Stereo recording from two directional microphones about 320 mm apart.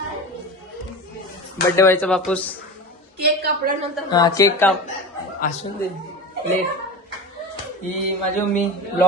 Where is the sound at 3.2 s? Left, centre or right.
Right.